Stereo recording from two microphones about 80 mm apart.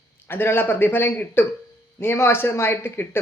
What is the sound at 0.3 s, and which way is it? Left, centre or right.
Speech, left.